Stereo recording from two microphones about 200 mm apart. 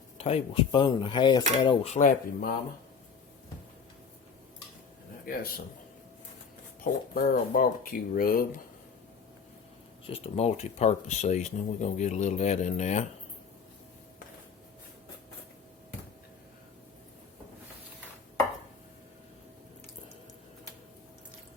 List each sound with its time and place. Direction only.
0.2 s speech: 30° left (ahead or behind)
6.8 s speech: 45° left (ahead or behind)
10.1 s speech: 30° left (ahead or behind)